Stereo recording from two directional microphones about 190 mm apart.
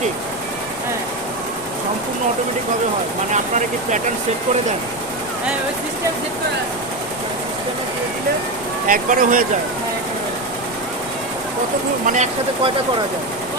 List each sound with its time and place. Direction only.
8.9 s speech: 45° right (ahead or behind)
12.0 s speech: 40° right (ahead or behind)